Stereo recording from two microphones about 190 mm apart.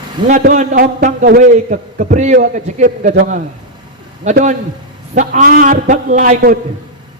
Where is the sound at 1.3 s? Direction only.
55° right (ahead or behind).